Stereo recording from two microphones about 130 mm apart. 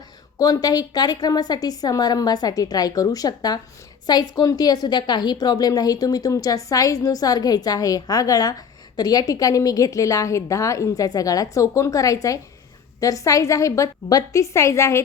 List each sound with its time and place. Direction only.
0.3 s a woman's voice: 30° left (ahead or behind)